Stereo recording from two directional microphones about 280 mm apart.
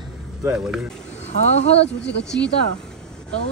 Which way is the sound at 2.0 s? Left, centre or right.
Left.